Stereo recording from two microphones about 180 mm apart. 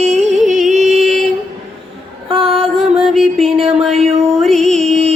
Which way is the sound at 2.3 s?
30° right (ahead or behind).